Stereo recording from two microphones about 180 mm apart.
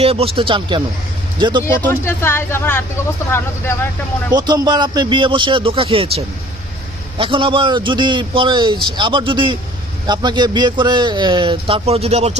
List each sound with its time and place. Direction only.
0.0 s a man's voice: 35° right (ahead or behind)
1.9 s speech: 15° left (ahead or behind)
4.3 s a man's voice: 20° right (ahead or behind)